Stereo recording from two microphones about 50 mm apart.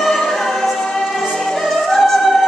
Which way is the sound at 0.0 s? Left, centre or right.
Centre.